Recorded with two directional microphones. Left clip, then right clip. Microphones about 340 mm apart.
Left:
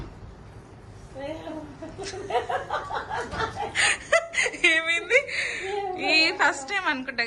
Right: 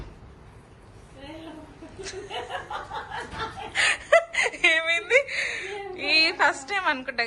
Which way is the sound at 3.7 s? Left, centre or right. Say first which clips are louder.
Right 3 dB; centre.